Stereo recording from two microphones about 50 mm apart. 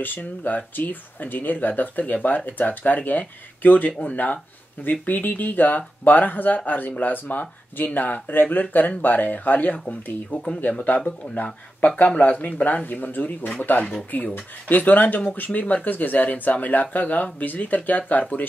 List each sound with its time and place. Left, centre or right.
0.0 s speech: left
12.8 s speech: left